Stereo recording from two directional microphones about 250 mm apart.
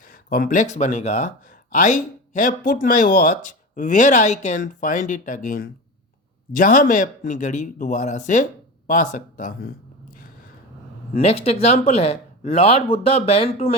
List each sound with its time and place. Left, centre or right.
0.3 s a man's voice: left
11.1 s speech: left